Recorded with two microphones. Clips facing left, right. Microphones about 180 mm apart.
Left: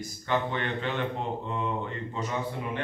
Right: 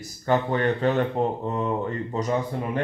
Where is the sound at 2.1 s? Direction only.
40° right (ahead or behind).